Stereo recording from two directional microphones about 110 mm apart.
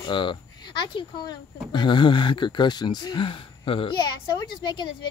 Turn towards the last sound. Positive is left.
turn(degrees=45)  # may be behind; listen again after turning